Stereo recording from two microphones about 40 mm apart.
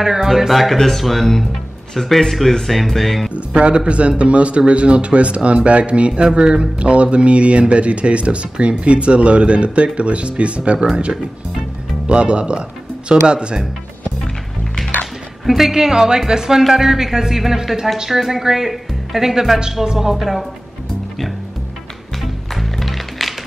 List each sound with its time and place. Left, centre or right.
0.0 s speech: centre
3.3 s speech: right
12.1 s speech: right
15.4 s speech: centre
22.2 s music: centre